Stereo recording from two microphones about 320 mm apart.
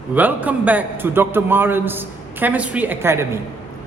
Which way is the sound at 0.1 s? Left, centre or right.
Centre.